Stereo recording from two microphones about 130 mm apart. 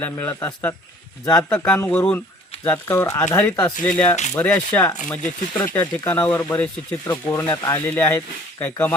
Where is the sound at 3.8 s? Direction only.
10° left (ahead or behind).